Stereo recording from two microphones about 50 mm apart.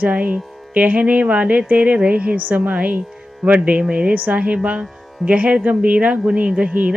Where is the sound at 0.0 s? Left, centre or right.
Right.